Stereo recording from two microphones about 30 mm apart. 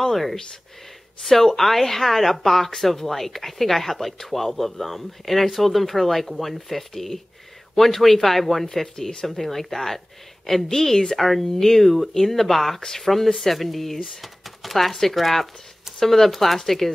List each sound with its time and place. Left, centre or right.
0.0 s speech: centre
16.3 s speech: centre